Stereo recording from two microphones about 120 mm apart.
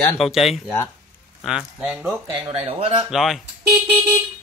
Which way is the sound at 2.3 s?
45° right (ahead or behind).